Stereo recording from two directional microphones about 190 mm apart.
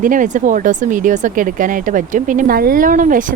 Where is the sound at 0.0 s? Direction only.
45° right (ahead or behind).